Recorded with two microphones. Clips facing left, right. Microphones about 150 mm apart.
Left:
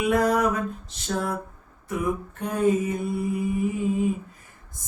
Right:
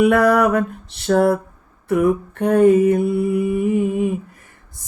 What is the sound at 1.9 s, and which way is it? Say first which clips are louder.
Mantra: right 10 dB; 65° right (ahead or behind).